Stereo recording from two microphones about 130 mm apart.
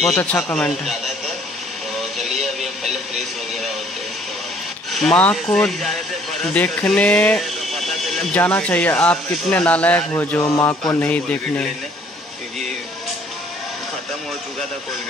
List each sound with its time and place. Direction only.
0.0 s speech: 10° left (ahead or behind)
2.0 s a sound: centre (ahead or behind)
4.9 s speech: 5° left (ahead or behind)
6.4 s speech: 10° left (ahead or behind)
6.9 s a sound: 10° left (ahead or behind)
8.4 s speech: 15° left (ahead or behind)
10.4 s music: 20° left (ahead or behind)
11.0 s speech: 10° left (ahead or behind)